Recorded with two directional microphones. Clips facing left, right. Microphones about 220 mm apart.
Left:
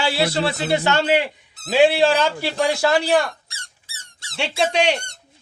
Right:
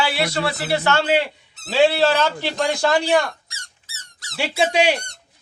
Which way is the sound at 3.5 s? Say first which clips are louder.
Left 1 dB; 30° left (ahead or behind).